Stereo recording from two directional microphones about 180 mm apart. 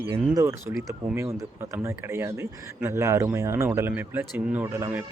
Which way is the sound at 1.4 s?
15° right (ahead or behind).